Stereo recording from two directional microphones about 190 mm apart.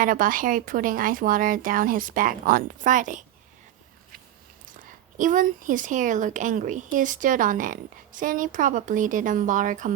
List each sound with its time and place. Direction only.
0.0 s a woman's voice: 45° right (ahead or behind)
4.7 s a woman's voice: 45° right (ahead or behind)